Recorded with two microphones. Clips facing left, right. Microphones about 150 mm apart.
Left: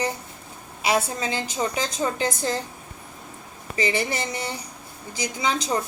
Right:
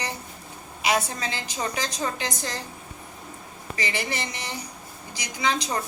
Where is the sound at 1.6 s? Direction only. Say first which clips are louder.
Left 3 dB; 25° left (ahead or behind).